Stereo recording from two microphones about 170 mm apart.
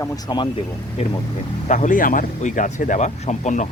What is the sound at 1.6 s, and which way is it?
Speech, 45° left (ahead or behind).